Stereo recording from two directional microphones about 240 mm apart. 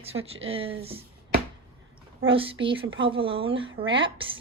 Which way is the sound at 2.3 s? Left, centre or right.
Right.